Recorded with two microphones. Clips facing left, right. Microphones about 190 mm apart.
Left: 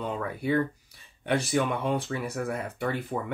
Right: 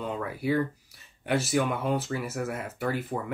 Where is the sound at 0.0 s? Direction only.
Centre (ahead or behind).